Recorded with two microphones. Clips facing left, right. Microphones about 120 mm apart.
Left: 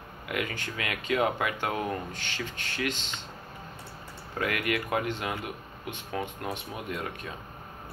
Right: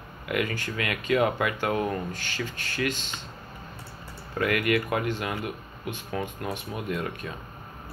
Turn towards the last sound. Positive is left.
turn(degrees=20)  # may be behind; listen again after turning